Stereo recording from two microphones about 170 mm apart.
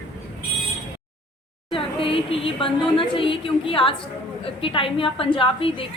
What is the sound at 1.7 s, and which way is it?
A woman's voice, 30° left (ahead or behind).